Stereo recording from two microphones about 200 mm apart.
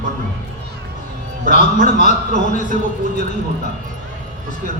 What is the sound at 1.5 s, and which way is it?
Speech, 40° left (ahead or behind).